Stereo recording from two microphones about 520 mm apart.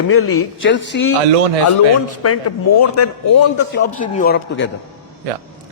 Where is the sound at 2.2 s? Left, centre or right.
Left.